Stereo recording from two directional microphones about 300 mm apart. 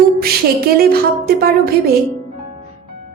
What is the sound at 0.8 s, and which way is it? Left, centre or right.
Music, right.